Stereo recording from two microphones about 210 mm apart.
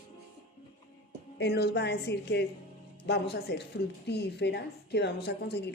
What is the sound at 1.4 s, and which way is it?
A woman's voice, 50° left (ahead or behind).